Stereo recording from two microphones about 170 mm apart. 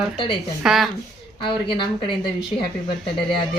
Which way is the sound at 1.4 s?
30° left (ahead or behind).